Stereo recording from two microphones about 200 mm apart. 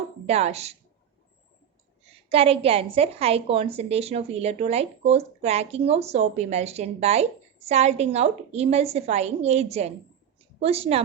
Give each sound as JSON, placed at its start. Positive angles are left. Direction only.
{"t": 0.3, "sound": "a woman's voice", "side_deg": -30}
{"t": 2.3, "sound": "a woman's voice", "side_deg": -30}